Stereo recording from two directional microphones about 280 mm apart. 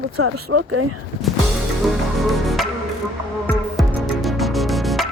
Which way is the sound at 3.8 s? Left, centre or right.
Centre.